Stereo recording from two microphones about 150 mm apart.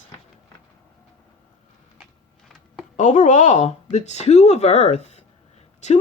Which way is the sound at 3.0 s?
55° left (ahead or behind).